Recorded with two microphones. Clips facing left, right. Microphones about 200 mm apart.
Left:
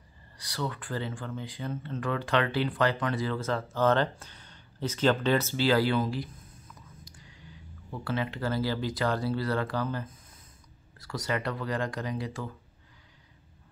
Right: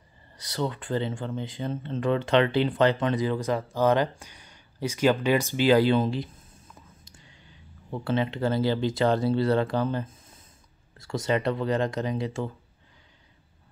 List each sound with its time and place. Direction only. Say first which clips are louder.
0.4 s speech: right 5 dB; 20° right (ahead or behind)